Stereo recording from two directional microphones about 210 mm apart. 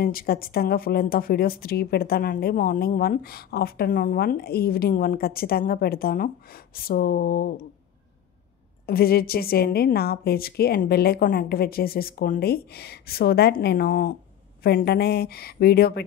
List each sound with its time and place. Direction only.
0.0 s speech: 45° left (ahead or behind)
8.8 s speech: 45° left (ahead or behind)